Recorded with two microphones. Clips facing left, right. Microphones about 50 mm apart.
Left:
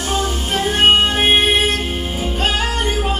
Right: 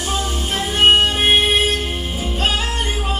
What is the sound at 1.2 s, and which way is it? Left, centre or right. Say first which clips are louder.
Music: left 1 dB; centre.